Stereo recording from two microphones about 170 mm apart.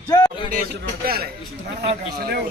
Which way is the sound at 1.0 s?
65° right (ahead or behind).